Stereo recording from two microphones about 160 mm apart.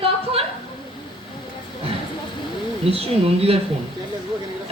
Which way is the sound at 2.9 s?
35° right (ahead or behind).